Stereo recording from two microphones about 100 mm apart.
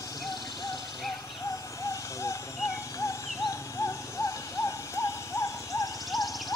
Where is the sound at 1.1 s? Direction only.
40° left (ahead or behind).